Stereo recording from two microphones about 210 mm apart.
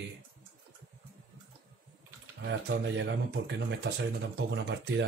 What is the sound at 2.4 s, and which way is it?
Speech, 55° right (ahead or behind).